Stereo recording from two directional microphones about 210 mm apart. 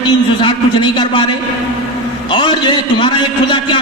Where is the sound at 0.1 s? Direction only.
20° left (ahead or behind).